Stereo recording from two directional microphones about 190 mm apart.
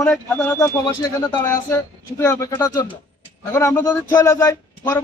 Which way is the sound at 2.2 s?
15° left (ahead or behind).